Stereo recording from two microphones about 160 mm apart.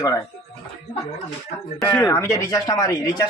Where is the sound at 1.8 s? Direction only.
20° left (ahead or behind).